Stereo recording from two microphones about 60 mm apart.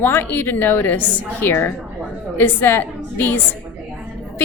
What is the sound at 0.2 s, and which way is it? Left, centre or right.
A woman's voice, left.